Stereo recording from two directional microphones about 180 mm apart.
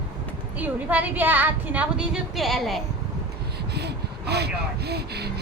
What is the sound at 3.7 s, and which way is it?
Speech, 65° right (ahead or behind).